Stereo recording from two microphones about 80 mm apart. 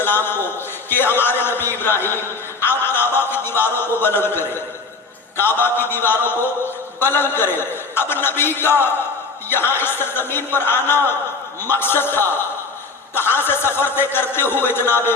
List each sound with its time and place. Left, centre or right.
0.0 s a man's voice: left